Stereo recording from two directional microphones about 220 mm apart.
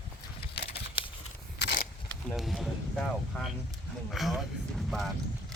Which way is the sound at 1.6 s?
50° left (ahead or behind).